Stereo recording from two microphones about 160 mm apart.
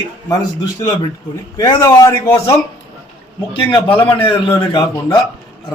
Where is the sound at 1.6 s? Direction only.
25° left (ahead or behind).